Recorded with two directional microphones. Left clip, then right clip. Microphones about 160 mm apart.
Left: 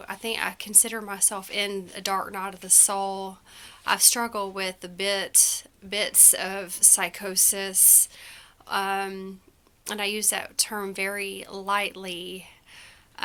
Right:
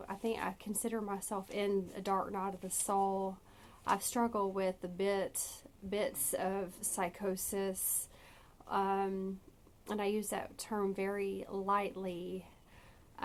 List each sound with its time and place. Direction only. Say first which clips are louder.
0.0 s a woman's voice: left 9 dB; 15° left (ahead or behind)
13.2 s scissors: left 9 dB; 15° left (ahead or behind)